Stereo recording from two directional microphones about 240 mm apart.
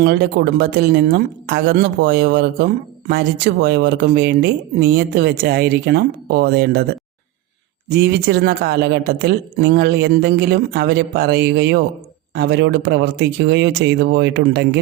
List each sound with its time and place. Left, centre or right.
0.0 s speech: right
7.9 s speech: right